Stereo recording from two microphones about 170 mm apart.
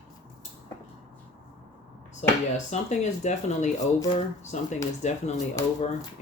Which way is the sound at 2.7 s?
40° left (ahead or behind).